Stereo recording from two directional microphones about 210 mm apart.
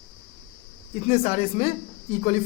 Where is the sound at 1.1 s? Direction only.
30° left (ahead or behind).